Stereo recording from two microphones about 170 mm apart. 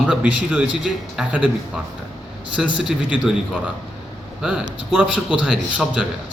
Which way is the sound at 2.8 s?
5° right (ahead or behind).